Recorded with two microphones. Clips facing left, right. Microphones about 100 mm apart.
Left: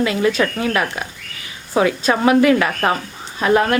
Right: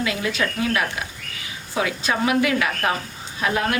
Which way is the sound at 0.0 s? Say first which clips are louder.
Left 7 dB; 40° left (ahead or behind).